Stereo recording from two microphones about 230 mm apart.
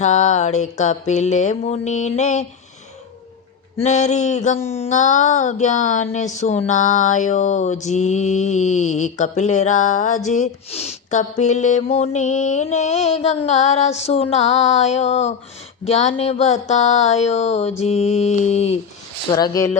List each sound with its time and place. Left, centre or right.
0.0 s child singing: left
3.8 s child singing: left
10.2 s speech: left
19.3 s speech: centre